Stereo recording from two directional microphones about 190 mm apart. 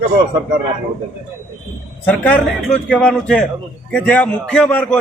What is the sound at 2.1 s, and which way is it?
A man's voice, 5° left (ahead or behind).